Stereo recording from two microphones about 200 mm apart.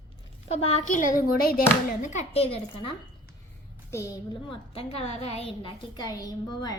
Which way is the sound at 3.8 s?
15° left (ahead or behind).